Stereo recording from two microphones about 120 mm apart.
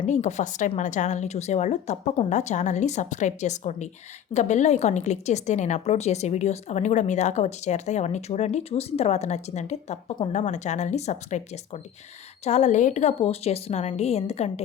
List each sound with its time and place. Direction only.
0.0 s a woman's voice: 85° left; by 14.6 s 65° left (ahead or behind)